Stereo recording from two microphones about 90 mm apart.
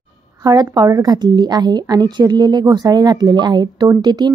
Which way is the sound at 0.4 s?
45° right (ahead or behind).